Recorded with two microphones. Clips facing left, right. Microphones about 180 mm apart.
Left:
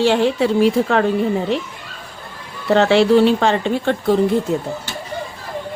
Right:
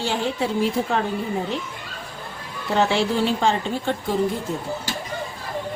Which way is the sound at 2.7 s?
70° left (ahead or behind).